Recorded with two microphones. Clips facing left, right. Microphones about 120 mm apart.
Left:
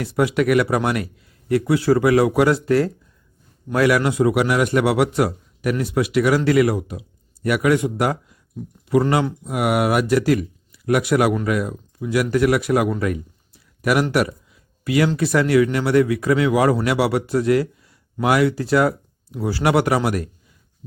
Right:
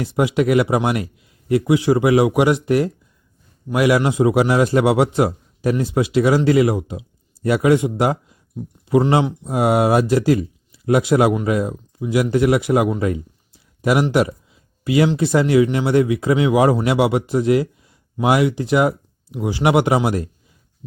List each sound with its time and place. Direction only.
0.0 s a man's voice: 25° right (ahead or behind)